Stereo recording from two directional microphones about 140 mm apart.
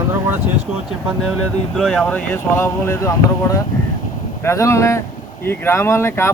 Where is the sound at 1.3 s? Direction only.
Centre (ahead or behind).